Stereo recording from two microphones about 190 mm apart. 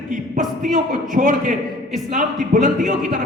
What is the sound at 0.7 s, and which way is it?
A man's voice, 45° right (ahead or behind).